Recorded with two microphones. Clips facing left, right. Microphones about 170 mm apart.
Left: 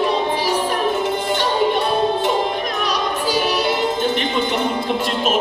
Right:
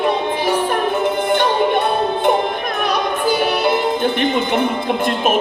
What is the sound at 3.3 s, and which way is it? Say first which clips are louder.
Music: right 3 dB; 55° right (ahead or behind).